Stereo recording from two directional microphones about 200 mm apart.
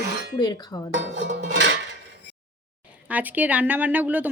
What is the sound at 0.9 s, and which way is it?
Music, 60° right (ahead or behind).